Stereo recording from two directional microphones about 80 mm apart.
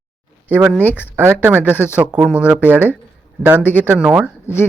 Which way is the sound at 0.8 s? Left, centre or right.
Right.